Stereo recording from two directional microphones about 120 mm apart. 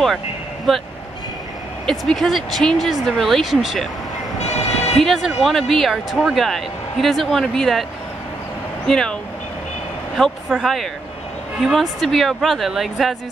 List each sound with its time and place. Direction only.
0.7 s speech: centre (ahead or behind)
1.9 s speech: centre (ahead or behind)
4.4 s vehicle: 65° left (ahead or behind)
4.9 s speech: centre (ahead or behind)
8.8 s speech: 5° left (ahead or behind)
10.1 s speech: centre (ahead or behind)